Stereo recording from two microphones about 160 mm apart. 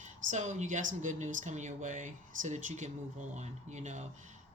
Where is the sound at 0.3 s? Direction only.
50° right (ahead or behind).